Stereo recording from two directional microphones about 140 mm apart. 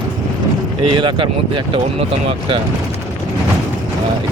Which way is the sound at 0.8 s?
35° right (ahead or behind).